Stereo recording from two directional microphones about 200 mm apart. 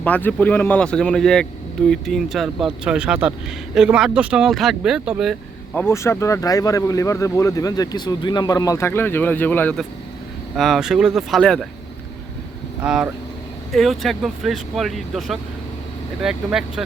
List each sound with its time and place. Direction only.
0.0 s speech: 5° left (ahead or behind)
5.7 s speech: 10° left (ahead or behind)
12.8 s speech: 5° right (ahead or behind)